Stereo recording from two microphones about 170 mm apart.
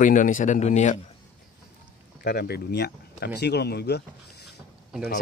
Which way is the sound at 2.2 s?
65° left (ahead or behind).